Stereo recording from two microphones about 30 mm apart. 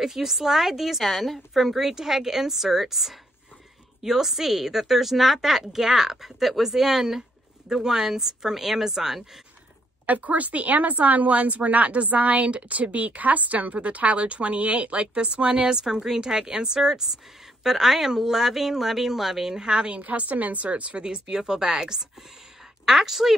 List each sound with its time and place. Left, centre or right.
0.0 s a woman's voice: centre
1.8 s a woman's voice: centre
10.0 s a woman's voice: right
17.6 s a woman's voice: centre
19.5 s speech: right
19.9 s a woman's voice: right
20.7 s a woman's voice: right
21.0 s speech: right
22.8 s a woman's voice: centre